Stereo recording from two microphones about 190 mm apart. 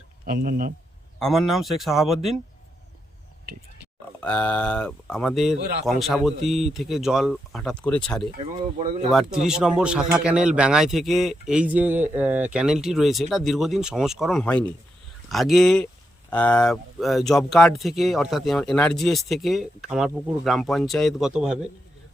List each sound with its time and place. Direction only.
0.3 s speech: 50° right (ahead or behind)
1.2 s a man's voice: centre (ahead or behind)
4.2 s a man's voice: 5° left (ahead or behind)
8.4 s speech: 30° right (ahead or behind)
9.1 s a man's voice: centre (ahead or behind)